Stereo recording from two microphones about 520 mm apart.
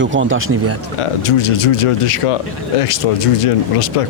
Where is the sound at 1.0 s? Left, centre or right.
Left.